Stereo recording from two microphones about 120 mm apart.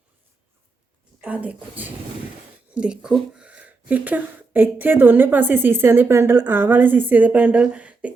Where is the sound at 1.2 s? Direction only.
10° right (ahead or behind).